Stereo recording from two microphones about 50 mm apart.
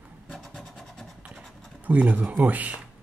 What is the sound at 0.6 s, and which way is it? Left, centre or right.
Vehicle, centre.